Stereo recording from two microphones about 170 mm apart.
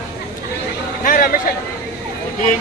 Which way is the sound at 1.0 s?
50° left (ahead or behind).